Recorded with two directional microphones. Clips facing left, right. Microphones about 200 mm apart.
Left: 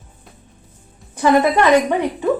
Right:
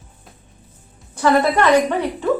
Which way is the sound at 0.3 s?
Centre (ahead or behind).